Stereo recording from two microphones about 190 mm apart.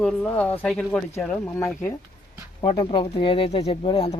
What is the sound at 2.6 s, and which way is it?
Speech, 25° left (ahead or behind).